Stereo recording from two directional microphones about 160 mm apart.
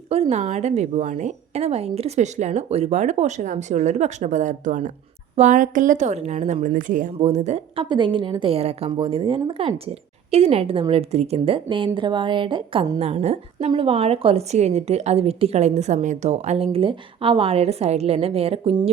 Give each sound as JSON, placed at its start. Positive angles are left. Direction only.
{"t": 0.1, "sound": "a woman's voice", "side_deg": -40}
{"t": 7.9, "sound": "speech", "side_deg": -30}
{"t": 13.0, "sound": "speech", "side_deg": -40}